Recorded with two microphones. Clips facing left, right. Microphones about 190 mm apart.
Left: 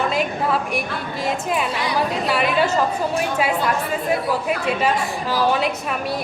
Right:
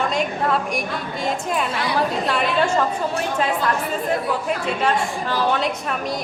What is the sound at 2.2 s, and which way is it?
Speech, 5° left (ahead or behind).